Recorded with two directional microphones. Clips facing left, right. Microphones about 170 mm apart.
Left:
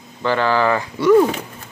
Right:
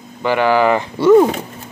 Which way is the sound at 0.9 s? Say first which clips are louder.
Right 3 dB; 30° right (ahead or behind).